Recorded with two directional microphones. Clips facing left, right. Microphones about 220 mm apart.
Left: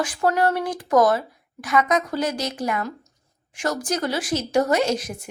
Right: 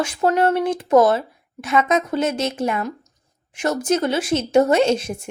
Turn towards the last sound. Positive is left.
turn(degrees=-25)  # may be behind; listen again after turning